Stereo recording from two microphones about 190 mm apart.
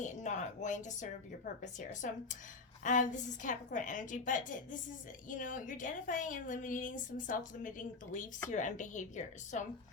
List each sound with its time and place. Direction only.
0.0 s a woman's voice: 40° left (ahead or behind)